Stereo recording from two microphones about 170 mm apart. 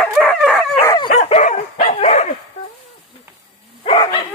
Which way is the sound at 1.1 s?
40° left (ahead or behind).